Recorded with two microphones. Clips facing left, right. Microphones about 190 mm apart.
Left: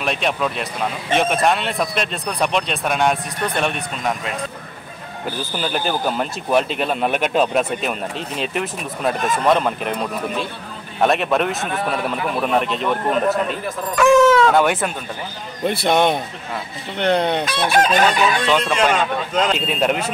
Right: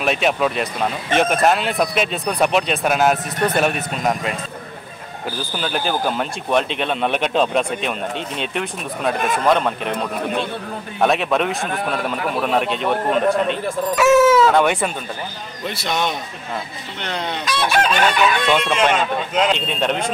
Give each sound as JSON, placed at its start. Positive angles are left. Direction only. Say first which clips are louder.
{"t": 0.0, "sound": "a man's voice", "louder": "right 3 dB", "side_deg": -5}
{"t": 5.6, "sound": "a man's voice", "louder": "even", "side_deg": 0}
{"t": 15.6, "sound": "speech", "louder": "left 6 dB", "side_deg": 55}
{"t": 17.0, "sound": "chicken", "louder": "left 8 dB", "side_deg": 60}
{"t": 18.5, "sound": "a man's voice", "louder": "even", "side_deg": 0}